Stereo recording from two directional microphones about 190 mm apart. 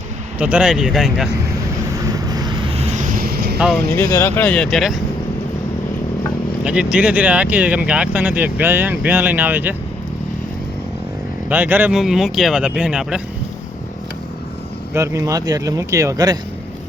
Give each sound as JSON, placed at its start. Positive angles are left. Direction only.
{"t": 0.3, "sound": "speech", "side_deg": -5}
{"t": 2.1, "sound": "vehicle", "side_deg": -20}
{"t": 3.9, "sound": "speech", "side_deg": 15}
{"t": 6.7, "sound": "speech", "side_deg": -5}
{"t": 11.4, "sound": "speech", "side_deg": -10}
{"t": 14.9, "sound": "speech", "side_deg": -15}